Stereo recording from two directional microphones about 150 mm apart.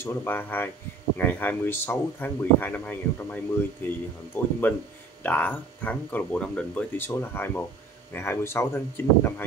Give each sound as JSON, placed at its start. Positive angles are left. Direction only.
{"t": 0.0, "sound": "speech", "side_deg": 15}